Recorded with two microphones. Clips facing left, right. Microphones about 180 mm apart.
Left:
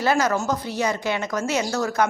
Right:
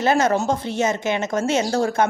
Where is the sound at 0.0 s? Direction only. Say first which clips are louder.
Right 3 dB; 25° right (ahead or behind).